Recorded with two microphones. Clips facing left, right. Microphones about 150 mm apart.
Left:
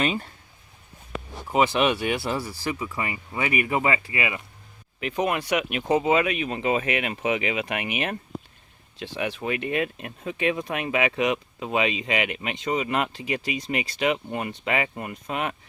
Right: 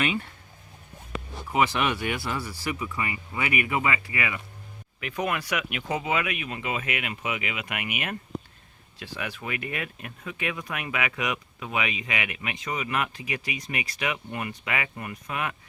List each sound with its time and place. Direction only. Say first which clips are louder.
0.0 s speech: left 2 dB; 35° left (ahead or behind)
1.5 s speech: left 4 dB; 25° left (ahead or behind)